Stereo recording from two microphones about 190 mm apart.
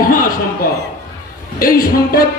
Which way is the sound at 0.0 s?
50° left (ahead or behind).